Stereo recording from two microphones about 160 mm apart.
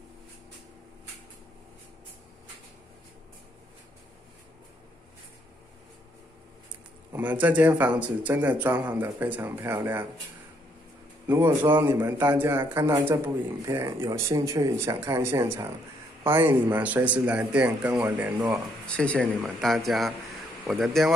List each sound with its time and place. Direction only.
7.1 s a man's voice: 10° right (ahead or behind)
11.2 s a man's voice: 15° right (ahead or behind)
18.9 s a man's voice: 10° left (ahead or behind)